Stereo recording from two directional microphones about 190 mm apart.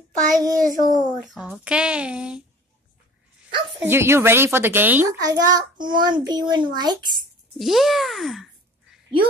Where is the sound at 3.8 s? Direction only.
10° right (ahead or behind).